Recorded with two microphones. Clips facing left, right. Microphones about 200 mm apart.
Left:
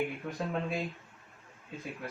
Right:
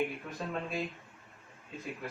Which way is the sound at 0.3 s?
15° left (ahead or behind).